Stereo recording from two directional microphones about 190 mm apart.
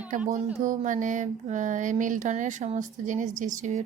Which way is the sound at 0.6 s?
40° right (ahead or behind).